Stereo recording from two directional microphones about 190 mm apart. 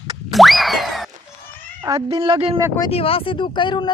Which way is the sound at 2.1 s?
30° right (ahead or behind).